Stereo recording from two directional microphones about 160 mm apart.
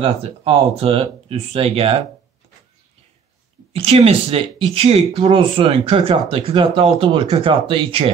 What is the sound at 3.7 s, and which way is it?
A man's voice, 40° right (ahead or behind).